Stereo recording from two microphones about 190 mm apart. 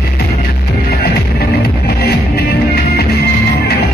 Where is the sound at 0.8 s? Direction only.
55° left (ahead or behind).